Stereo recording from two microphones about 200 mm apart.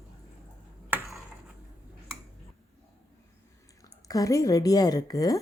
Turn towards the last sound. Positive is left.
turn(degrees=15)  # may be behind; listen again after turning